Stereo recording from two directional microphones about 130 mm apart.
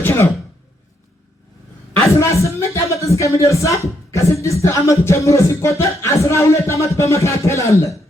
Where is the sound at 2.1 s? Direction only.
20° left (ahead or behind).